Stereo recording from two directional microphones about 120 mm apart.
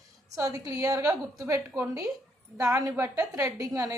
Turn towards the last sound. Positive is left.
turn(degrees=-30)  # may be behind; listen again after turning